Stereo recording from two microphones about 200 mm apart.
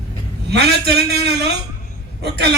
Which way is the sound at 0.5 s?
55° right (ahead or behind).